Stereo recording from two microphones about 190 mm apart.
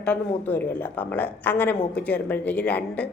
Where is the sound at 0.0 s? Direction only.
10° left (ahead or behind).